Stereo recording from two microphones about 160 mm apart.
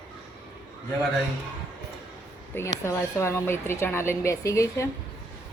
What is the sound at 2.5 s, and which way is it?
Speech, 15° left (ahead or behind).